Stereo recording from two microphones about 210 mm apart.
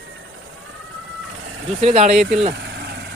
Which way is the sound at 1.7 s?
30° right (ahead or behind).